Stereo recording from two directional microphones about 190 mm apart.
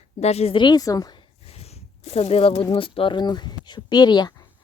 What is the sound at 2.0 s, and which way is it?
Speech, 35° left (ahead or behind).